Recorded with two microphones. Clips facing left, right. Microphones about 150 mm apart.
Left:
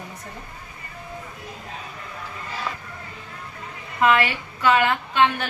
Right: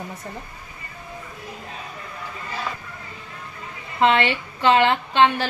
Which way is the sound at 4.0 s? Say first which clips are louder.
Right 1 dB; 25° right (ahead or behind).